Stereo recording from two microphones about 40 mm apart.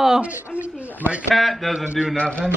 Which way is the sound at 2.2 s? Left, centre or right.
Left.